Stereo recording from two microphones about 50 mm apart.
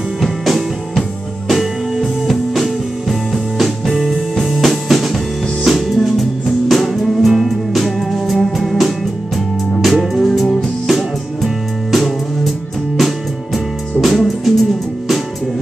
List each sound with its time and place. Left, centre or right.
0.2 s music: centre